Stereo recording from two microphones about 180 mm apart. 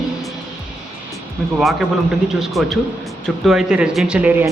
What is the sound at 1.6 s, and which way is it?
A man's voice, centre (ahead or behind).